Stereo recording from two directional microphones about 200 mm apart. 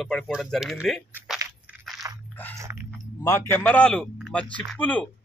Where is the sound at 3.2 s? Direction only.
10° left (ahead or behind).